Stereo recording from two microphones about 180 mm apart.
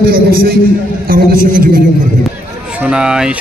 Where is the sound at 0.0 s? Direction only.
55° right (ahead or behind).